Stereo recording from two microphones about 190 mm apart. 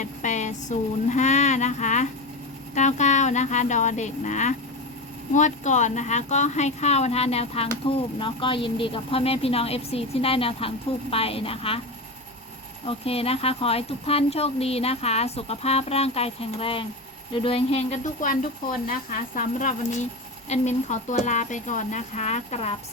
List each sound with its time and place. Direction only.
0.0 s a sound: 40° left (ahead or behind)
2.7 s a woman's voice: 40° left (ahead or behind)
12.8 s a woman's voice: 30° left (ahead or behind)
19.4 s a woman's voice: 40° left (ahead or behind)